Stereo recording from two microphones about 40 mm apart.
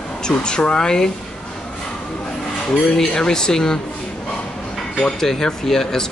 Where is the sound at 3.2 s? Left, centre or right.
Centre.